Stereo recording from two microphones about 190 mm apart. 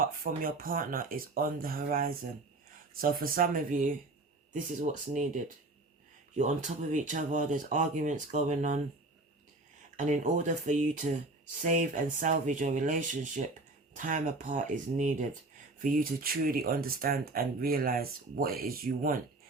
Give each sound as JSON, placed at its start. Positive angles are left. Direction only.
{"t": 0.0, "sound": "speech", "side_deg": -45}
{"t": 10.0, "sound": "speech", "side_deg": -40}